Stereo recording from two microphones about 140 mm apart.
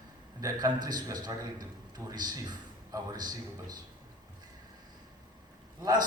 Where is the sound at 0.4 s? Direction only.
30° right (ahead or behind).